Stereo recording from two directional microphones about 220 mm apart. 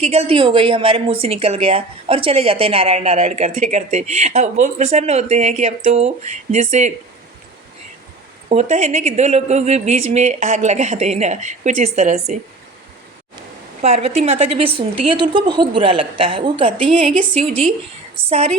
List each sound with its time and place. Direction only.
0.0 s a woman's voice: 30° right (ahead or behind)
8.4 s a woman's voice: 30° right (ahead or behind)
13.8 s a woman's voice: 30° right (ahead or behind)